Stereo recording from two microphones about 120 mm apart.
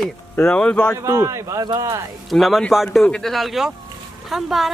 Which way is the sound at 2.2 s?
Centre (ahead or behind).